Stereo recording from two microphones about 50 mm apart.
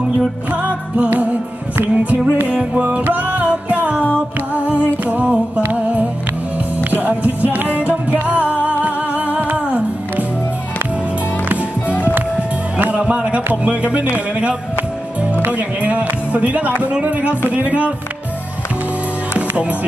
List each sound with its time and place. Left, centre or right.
0.5 s music: right
1.8 s speech: right
2.7 s music: right
5.7 s speech: right
6.8 s music: right
12.7 s speech: right
15.5 s speech: right
17.5 s music: right
19.3 s music: right